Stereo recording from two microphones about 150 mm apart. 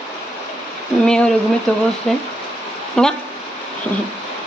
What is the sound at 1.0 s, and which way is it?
Speech, 5° left (ahead or behind).